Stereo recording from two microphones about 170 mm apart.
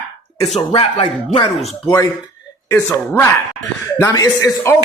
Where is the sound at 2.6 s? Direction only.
15° left (ahead or behind).